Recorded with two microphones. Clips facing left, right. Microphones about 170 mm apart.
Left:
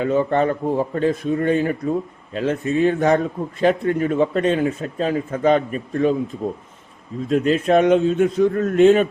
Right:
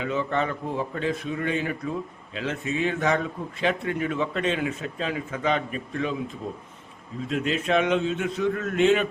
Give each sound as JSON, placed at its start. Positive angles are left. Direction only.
{"t": 0.0, "sound": "speech", "side_deg": 45}
{"t": 7.3, "sound": "speech", "side_deg": 45}